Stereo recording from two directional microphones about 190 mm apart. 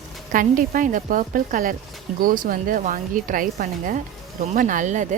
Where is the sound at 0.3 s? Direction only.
45° right (ahead or behind).